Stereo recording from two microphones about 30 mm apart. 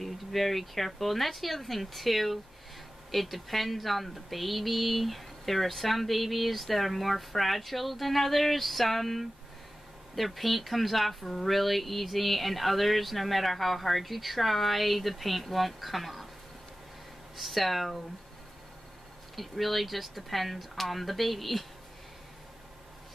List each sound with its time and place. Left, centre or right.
0.0 s speech: centre
17.4 s speech: centre
19.3 s speech: centre